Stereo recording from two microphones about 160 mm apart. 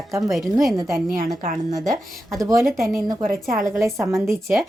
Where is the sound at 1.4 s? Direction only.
55° right (ahead or behind).